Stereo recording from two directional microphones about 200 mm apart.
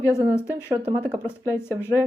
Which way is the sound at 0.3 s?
10° left (ahead or behind).